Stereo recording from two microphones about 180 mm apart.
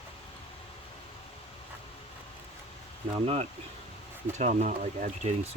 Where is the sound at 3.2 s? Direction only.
35° right (ahead or behind).